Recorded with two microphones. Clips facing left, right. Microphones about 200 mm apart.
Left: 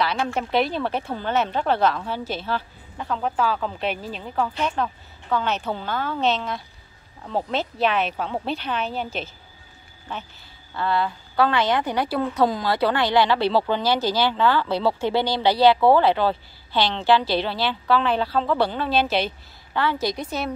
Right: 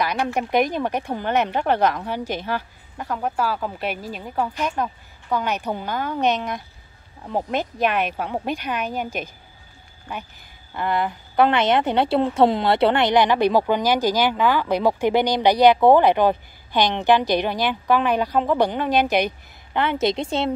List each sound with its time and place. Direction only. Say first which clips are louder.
0.0 s a woman's voice: right 1 dB; 15° right (ahead or behind)